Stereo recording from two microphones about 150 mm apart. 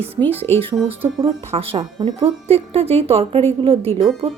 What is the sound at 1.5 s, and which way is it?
A woman's voice, 40° right (ahead or behind).